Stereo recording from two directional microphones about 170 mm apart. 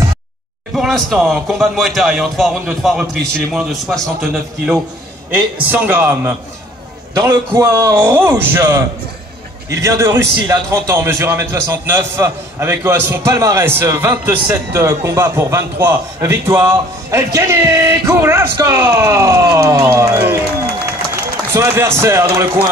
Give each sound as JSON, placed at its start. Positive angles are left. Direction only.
{"t": 0.7, "sound": "a man's voice", "side_deg": 0}
{"t": 5.3, "sound": "a man's voice", "side_deg": -10}
{"t": 21.5, "sound": "a man's voice", "side_deg": -15}